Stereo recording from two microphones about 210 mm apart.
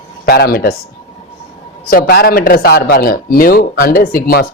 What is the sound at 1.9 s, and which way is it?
Speech, 45° left (ahead or behind).